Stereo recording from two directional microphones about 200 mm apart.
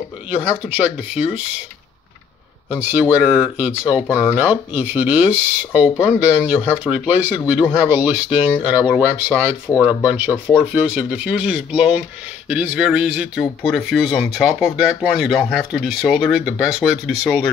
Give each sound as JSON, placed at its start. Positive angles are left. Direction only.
{"t": 2.8, "sound": "speech", "side_deg": -10}